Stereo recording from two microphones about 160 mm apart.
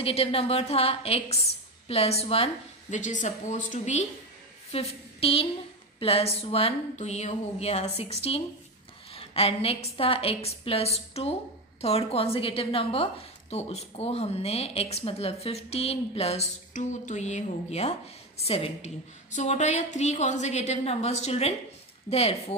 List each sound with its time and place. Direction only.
0.0 s a woman's voice: 35° left (ahead or behind)